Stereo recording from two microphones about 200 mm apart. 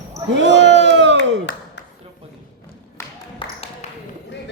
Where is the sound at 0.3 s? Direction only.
60° right (ahead or behind).